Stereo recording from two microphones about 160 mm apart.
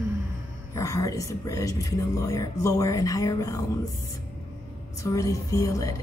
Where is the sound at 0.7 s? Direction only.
20° left (ahead or behind).